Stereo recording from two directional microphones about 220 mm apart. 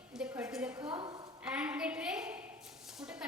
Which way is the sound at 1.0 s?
20° right (ahead or behind).